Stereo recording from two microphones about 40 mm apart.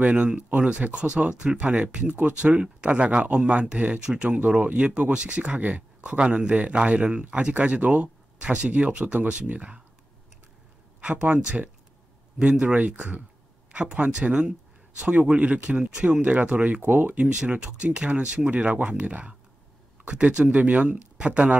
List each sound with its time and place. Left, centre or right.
0.0 s a man's voice: right
4.4 s speech: right
4.7 s speech: right
5.3 s a man's voice: right
5.9 s a man's voice: right
11.2 s a man's voice: right
15.1 s speech: centre
15.4 s a man's voice: right
17.1 s a man's voice: right